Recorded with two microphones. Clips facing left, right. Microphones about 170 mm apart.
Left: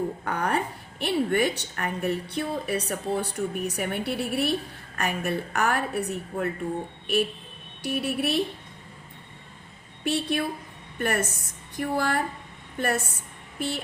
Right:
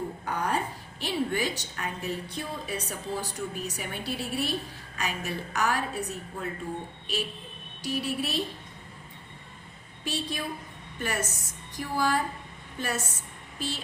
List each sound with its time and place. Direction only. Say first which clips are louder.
0.3 s a woman's voice: even; 60° left (ahead or behind)
7.8 s a woman's voice: left 3 dB; 60° left (ahead or behind)
10.0 s a woman's voice: left 7 dB; 60° left (ahead or behind)